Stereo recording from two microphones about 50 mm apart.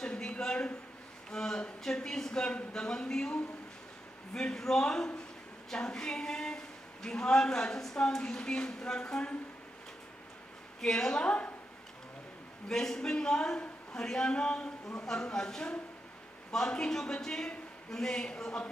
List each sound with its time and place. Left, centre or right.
0.0 s a sound: centre
0.4 s a woman's voice: centre
10.8 s a woman's voice: centre
12.6 s a woman's voice: centre